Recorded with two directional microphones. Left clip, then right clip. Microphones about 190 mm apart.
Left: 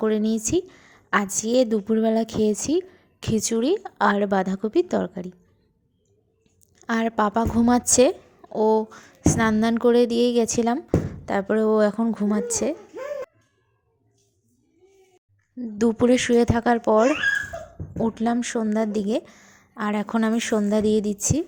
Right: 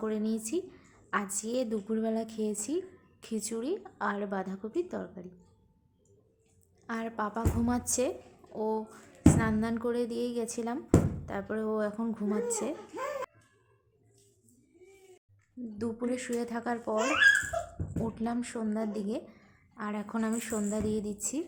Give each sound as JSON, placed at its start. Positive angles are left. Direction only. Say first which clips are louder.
{"t": 0.0, "sound": "a woman's voice", "louder": "left 11 dB", "side_deg": 35}
{"t": 6.7, "sound": "a woman's voice", "louder": "left 12 dB", "side_deg": 35}
{"t": 15.8, "sound": "a woman's voice", "louder": "left 15 dB", "side_deg": 40}